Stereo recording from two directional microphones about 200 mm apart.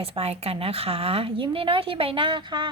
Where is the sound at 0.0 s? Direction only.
30° right (ahead or behind).